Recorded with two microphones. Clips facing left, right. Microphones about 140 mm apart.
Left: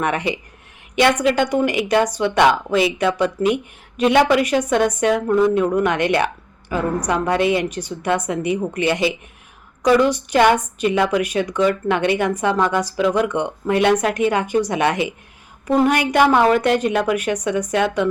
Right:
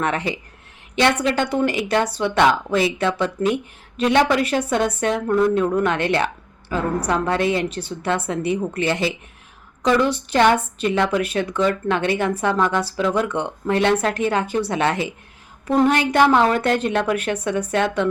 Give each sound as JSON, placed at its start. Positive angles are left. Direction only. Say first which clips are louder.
{"t": 0.0, "sound": "a woman's voice", "louder": "left 2 dB", "side_deg": 15}
{"t": 15.7, "sound": "a woman's voice", "louder": "left 1 dB", "side_deg": 5}